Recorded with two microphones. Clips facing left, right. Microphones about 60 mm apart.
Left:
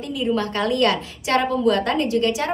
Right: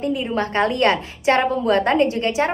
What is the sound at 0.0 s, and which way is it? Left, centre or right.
A woman's voice, right.